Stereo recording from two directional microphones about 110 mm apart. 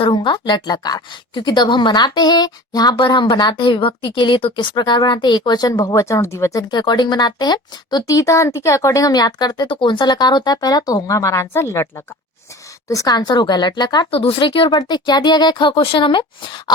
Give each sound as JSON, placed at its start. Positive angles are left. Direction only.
{"t": 0.0, "sound": "a woman's voice", "side_deg": 45}
{"t": 14.1, "sound": "speech", "side_deg": 55}